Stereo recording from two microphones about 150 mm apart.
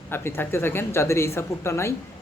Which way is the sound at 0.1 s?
15° left (ahead or behind).